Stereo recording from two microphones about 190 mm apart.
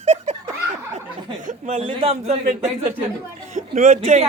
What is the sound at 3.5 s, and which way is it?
Speech, 40° right (ahead or behind).